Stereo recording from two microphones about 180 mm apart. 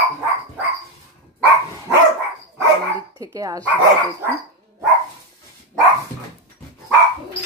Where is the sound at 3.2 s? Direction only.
20° right (ahead or behind).